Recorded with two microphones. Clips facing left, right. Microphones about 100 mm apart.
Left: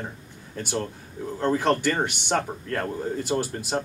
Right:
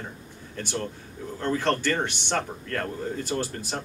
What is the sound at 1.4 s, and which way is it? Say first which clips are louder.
Speech: left 3 dB; 15° left (ahead or behind).